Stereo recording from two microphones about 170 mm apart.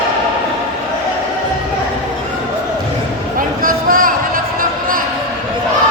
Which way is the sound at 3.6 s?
55° right (ahead or behind).